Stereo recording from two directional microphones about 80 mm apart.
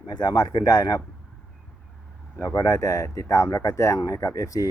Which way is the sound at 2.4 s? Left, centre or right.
Left.